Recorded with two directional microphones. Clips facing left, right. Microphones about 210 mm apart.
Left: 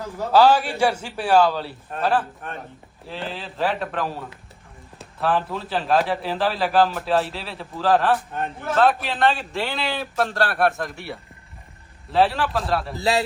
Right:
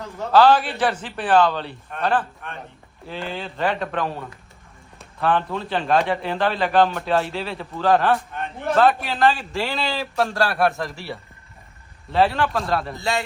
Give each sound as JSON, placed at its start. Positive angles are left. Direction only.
{"t": 0.0, "sound": "a man's voice", "side_deg": 0}
{"t": 0.3, "sound": "a man's voice", "side_deg": 15}
{"t": 2.4, "sound": "a man's voice", "side_deg": 45}
{"t": 3.1, "sound": "a man's voice", "side_deg": 0}
{"t": 12.1, "sound": "a man's voice", "side_deg": 0}
{"t": 13.0, "sound": "a man's voice", "side_deg": 35}